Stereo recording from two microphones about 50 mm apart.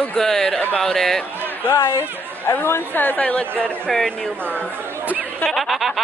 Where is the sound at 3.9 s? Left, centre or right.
Centre.